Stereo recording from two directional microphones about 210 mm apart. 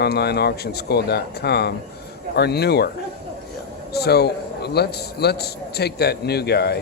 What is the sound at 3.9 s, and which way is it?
A man's voice, 50° left (ahead or behind).